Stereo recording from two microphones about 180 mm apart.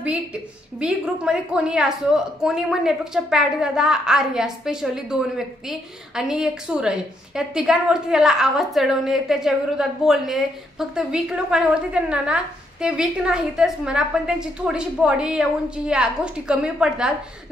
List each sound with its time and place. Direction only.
0.0 s a woman's voice: 5° right (ahead or behind)